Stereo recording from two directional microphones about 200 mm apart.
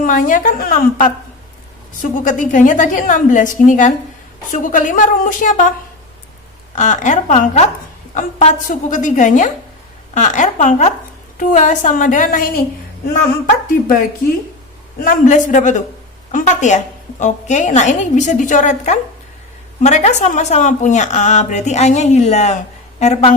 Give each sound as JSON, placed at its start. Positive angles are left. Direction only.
{"t": 0.0, "sound": "a woman's voice", "side_deg": 45}
{"t": 6.7, "sound": "a woman's voice", "side_deg": 40}
{"t": 15.0, "sound": "a woman's voice", "side_deg": 40}